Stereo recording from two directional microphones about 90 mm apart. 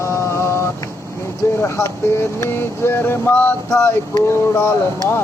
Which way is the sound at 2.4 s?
25° left (ahead or behind).